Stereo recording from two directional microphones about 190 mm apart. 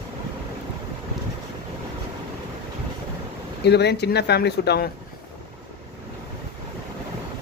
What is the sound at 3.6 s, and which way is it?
Speech, 60° left (ahead or behind).